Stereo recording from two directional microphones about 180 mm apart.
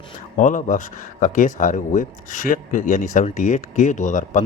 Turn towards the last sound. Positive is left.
turn(degrees=45)  # may be behind; listen again after turning